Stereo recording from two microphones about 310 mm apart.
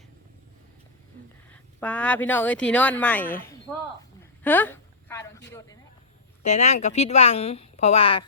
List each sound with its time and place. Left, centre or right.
1.5 s speech: centre
4.4 s a sound: centre
5.5 s speech: centre
6.5 s a woman's voice: left